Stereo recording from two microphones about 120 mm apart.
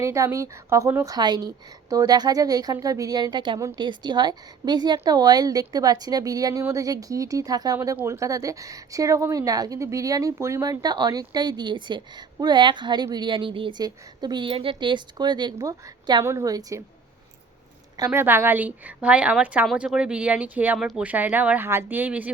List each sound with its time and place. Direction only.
0.0 s speech: 25° right (ahead or behind)
1.1 s a woman's voice: 35° right (ahead or behind)
18.1 s a woman's voice: 20° right (ahead or behind)
20.7 s speech: centre (ahead or behind)
21.0 s a woman's voice: 15° right (ahead or behind)